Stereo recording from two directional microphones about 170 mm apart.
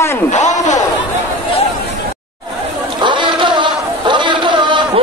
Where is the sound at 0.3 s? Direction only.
45° left (ahead or behind).